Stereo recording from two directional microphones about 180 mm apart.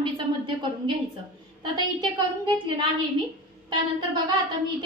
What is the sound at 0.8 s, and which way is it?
A woman's voice, 30° right (ahead or behind).